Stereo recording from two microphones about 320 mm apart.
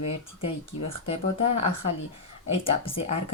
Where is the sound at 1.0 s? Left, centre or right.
Centre.